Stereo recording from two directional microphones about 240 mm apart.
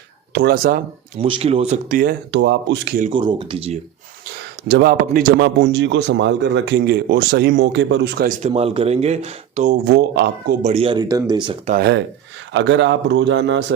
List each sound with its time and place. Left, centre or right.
0.3 s speech: right
1.2 s speech: right
3.1 s speech: centre
4.7 s a man's voice: right
8.4 s speech: right
9.9 s a man's voice: right
10.6 s speech: right
11.7 s a man's voice: right